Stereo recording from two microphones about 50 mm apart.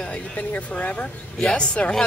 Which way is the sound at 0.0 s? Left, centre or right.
Left.